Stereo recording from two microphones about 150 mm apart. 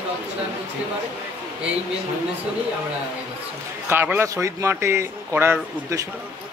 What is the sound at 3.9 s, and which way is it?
Speech, 15° right (ahead or behind).